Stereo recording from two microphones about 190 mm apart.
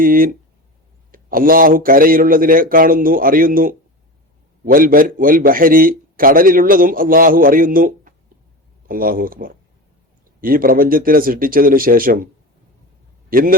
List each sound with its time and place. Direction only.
0.0 s a man's voice: 50° right (ahead or behind)
13.3 s a man's voice: 50° right (ahead or behind)